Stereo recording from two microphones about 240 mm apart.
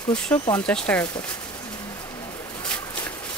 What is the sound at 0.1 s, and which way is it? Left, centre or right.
Speech, centre.